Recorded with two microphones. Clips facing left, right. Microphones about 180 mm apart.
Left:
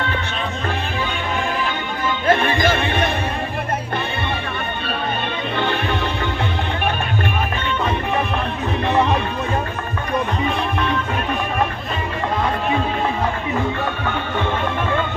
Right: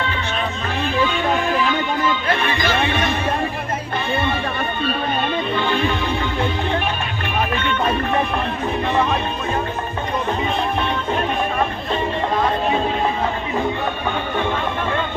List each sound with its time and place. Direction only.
1.6 s music: 50° left (ahead or behind)
5.5 s music: 65° left (ahead or behind)